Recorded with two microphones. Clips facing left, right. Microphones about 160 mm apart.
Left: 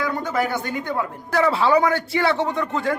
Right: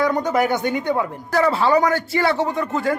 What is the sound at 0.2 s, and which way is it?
Speech, 20° right (ahead or behind).